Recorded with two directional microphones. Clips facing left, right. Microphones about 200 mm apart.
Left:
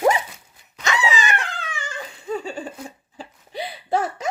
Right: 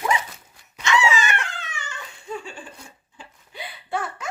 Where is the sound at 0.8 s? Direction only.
40° left (ahead or behind).